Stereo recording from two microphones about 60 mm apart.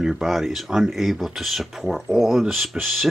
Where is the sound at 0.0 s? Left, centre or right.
Centre.